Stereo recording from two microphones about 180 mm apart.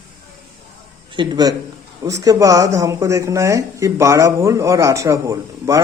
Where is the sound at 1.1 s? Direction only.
25° right (ahead or behind).